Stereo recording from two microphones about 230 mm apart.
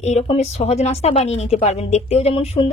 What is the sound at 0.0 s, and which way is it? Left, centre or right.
Speech, left.